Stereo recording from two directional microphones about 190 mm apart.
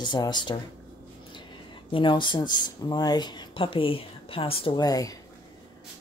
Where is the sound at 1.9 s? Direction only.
25° left (ahead or behind).